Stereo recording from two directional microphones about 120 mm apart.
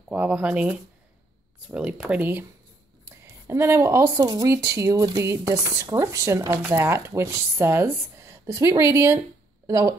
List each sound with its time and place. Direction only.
0.1 s speech: 10° right (ahead or behind); by 9.9 s 25° right (ahead or behind)